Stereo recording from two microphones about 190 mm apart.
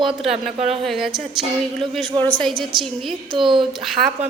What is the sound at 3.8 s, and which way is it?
Speech, centre (ahead or behind).